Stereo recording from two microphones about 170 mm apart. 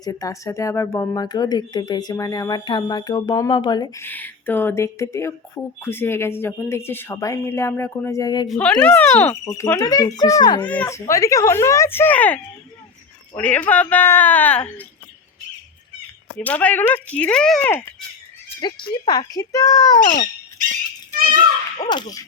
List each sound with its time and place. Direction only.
0.0 s speech: 20° left (ahead or behind)
4.0 s speech: 10° left (ahead or behind)
8.4 s speech: 5° left (ahead or behind); by 10.6 s 20° left (ahead or behind)
10.6 s speech: 10° left (ahead or behind)
16.4 s speech: 10° left (ahead or behind)
18.4 s speech: 25° left (ahead or behind)
21.8 s speech: 25° left (ahead or behind)